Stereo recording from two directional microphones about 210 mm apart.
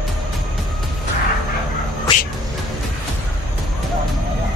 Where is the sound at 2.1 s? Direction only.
20° left (ahead or behind).